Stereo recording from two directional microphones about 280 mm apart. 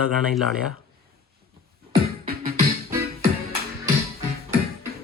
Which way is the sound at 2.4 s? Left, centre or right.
Right.